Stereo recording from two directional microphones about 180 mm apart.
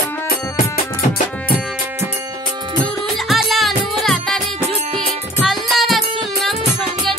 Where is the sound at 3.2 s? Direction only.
Centre (ahead or behind).